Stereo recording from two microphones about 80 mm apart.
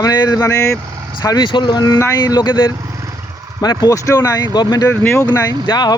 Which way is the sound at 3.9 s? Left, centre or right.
Left.